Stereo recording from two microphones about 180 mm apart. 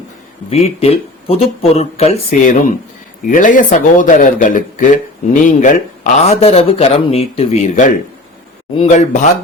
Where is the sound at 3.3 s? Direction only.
45° left (ahead or behind).